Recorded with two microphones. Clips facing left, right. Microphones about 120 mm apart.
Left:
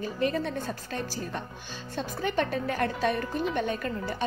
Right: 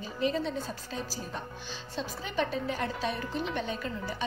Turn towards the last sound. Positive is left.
turn(degrees=55)  # may be behind; listen again after turning